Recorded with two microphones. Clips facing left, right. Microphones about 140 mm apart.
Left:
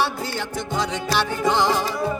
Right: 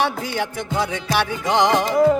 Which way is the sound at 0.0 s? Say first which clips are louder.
Right 3 dB; 15° right (ahead or behind).